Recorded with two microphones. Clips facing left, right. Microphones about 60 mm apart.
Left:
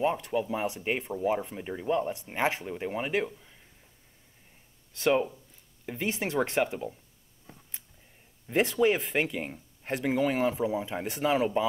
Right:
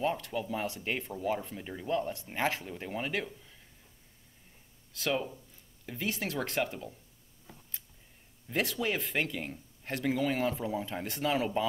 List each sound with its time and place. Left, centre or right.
0.0 s speech: centre
5.0 s speech: left
8.5 s speech: centre